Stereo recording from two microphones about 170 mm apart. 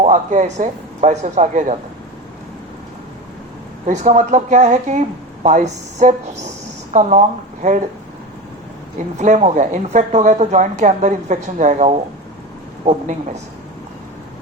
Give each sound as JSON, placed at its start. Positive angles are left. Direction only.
{"t": 0.0, "sound": "speech", "side_deg": -45}
{"t": 3.8, "sound": "speech", "side_deg": -45}
{"t": 9.1, "sound": "speech", "side_deg": -45}